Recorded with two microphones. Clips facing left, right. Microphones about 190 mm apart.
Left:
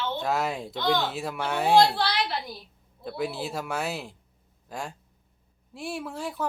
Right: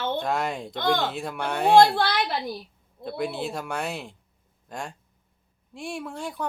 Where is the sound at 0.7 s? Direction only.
50° right (ahead or behind).